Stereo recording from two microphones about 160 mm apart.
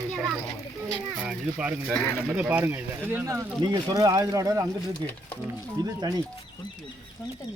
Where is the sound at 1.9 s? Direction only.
10° left (ahead or behind).